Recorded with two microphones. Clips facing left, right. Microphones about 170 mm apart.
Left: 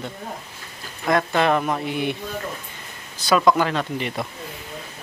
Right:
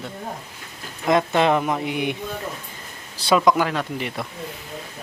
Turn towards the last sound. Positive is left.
turn(degrees=0)  # may be behind; listen again after turning